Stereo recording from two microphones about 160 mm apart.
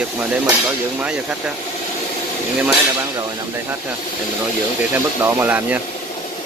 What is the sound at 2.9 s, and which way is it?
Speech, 20° right (ahead or behind).